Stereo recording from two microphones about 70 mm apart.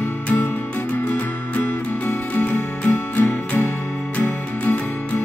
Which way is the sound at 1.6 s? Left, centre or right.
Left.